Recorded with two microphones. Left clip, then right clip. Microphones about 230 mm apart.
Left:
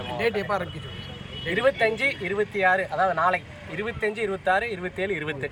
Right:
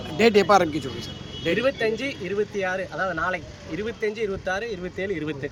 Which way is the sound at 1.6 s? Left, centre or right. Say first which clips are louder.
Left 4 dB; centre.